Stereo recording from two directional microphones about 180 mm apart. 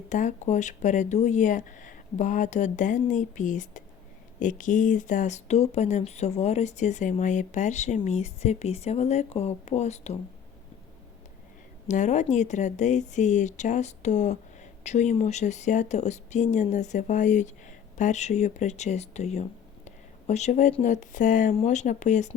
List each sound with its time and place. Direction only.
0.1 s speech: 45° left (ahead or behind)
11.9 s speech: 40° left (ahead or behind)